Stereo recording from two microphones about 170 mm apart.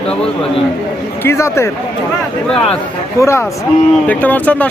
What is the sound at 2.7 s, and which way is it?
Speech, 15° left (ahead or behind).